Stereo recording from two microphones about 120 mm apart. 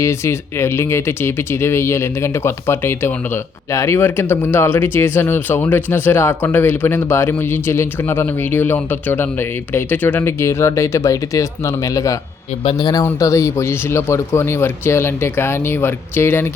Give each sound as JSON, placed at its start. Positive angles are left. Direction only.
{"t": 0.0, "sound": "speech", "side_deg": 25}